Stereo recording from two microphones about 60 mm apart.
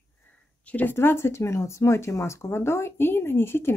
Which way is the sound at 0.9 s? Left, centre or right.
Left.